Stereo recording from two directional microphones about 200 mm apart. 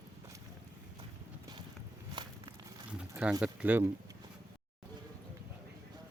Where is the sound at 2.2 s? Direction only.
20° right (ahead or behind).